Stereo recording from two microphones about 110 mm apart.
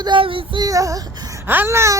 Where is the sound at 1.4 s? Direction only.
20° right (ahead or behind).